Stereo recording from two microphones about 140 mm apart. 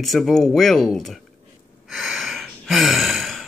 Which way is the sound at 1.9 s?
Centre (ahead or behind).